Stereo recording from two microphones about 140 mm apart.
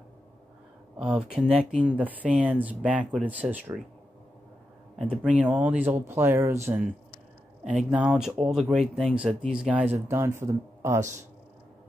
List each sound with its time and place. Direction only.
0.9 s speech: 5° right (ahead or behind)
5.4 s speech: 10° right (ahead or behind)
7.6 s speech: 10° right (ahead or behind)